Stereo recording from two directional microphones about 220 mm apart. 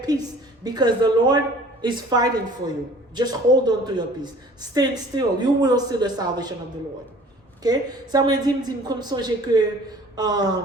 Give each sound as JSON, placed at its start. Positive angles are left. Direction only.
{"t": 0.0, "sound": "a woman's voice", "side_deg": -20}
{"t": 7.6, "sound": "a woman's voice", "side_deg": -15}